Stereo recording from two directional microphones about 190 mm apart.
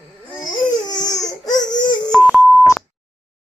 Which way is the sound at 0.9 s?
20° left (ahead or behind).